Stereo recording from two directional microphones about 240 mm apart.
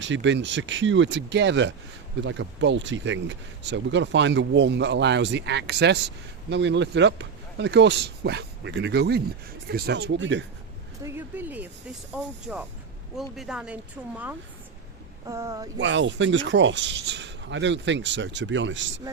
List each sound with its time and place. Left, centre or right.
0.0 s speech: right
11.0 s speech: centre
15.3 s speech: centre
15.8 s speech: right